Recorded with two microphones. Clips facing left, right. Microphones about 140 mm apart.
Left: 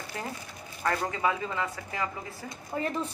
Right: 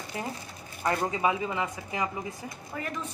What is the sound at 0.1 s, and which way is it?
A woman's voice, 20° right (ahead or behind).